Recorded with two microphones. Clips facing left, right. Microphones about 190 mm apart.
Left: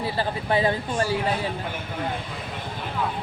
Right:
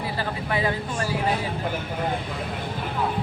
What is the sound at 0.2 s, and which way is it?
Speech, 30° left (ahead or behind).